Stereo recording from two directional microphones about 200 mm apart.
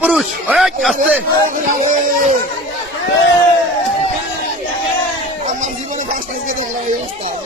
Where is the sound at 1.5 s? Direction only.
40° right (ahead or behind).